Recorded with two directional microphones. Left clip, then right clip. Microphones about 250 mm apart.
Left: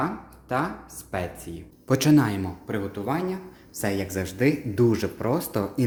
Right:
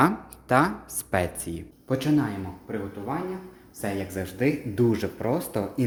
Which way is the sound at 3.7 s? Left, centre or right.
Left.